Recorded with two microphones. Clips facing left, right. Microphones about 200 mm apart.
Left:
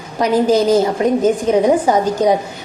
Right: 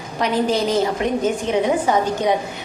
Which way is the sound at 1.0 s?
35° left (ahead or behind).